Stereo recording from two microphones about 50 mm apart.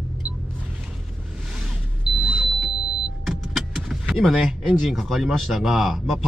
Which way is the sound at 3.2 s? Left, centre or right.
Centre.